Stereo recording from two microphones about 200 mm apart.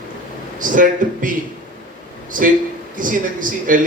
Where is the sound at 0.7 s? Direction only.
40° right (ahead or behind).